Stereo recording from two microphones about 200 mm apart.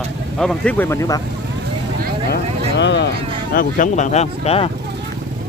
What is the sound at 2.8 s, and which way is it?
Speech, 60° left (ahead or behind).